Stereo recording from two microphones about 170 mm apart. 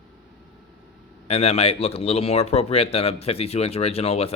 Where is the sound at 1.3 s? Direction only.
35° left (ahead or behind).